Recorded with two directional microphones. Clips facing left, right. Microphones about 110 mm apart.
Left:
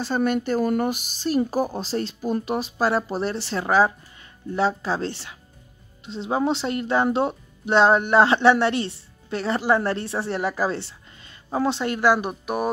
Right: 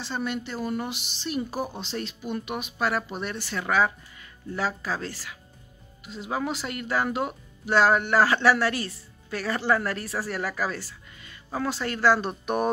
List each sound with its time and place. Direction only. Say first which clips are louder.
0.0 s speech: left 8 dB; 50° left (ahead or behind); by 12.4 s 15° left (ahead or behind)